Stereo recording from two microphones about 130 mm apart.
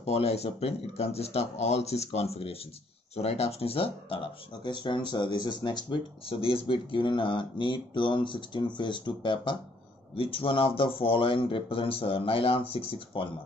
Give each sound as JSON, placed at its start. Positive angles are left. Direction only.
{"t": 0.0, "sound": "speech", "side_deg": 55}